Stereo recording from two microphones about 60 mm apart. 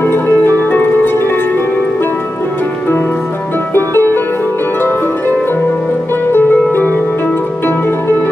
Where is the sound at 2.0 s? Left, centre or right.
Left.